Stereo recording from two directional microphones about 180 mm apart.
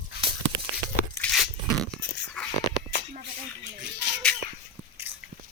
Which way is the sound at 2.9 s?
70° right (ahead or behind).